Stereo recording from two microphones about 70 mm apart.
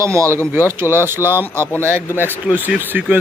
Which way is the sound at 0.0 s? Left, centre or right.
Right.